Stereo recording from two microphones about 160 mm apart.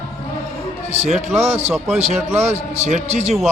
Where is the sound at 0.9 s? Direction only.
45° right (ahead or behind).